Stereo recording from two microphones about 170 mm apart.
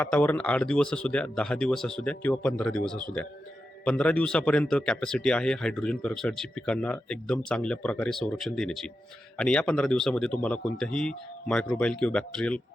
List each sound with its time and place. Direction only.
0.0 s speech: 10° left (ahead or behind)